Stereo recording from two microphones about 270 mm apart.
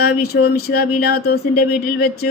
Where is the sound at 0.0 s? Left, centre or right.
Left.